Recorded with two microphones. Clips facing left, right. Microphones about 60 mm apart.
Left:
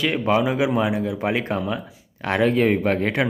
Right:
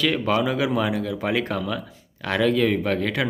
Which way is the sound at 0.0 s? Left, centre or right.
Centre.